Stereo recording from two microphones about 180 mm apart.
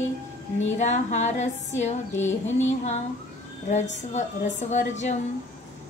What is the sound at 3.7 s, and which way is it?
Speech, 40° left (ahead or behind).